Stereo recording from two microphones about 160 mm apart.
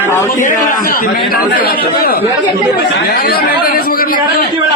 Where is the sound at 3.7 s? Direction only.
70° left (ahead or behind).